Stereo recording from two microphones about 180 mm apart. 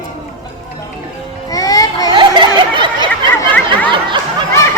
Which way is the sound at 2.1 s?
25° right (ahead or behind).